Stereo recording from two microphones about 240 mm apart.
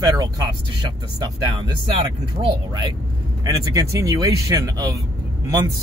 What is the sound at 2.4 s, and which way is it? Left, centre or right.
Speech, centre.